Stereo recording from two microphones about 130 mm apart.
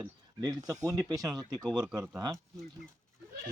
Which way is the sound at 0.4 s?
30° right (ahead or behind).